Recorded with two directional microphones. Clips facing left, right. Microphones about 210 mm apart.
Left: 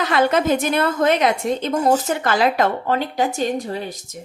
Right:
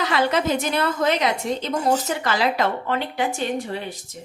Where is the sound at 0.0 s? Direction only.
50° left (ahead or behind).